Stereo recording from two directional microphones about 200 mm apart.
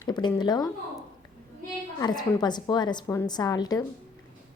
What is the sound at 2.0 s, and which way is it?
A woman's voice, 20° left (ahead or behind).